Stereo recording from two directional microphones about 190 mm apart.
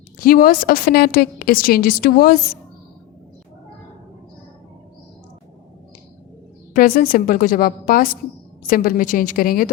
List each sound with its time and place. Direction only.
0.2 s a woman's voice: 50° left (ahead or behind)
6.7 s a woman's voice: 50° left (ahead or behind)